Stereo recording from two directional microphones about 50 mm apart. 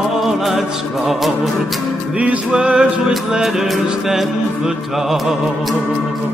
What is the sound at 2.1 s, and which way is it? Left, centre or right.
Music, right.